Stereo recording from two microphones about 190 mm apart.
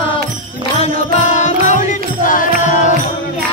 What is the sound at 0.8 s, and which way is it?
Music, 35° left (ahead or behind).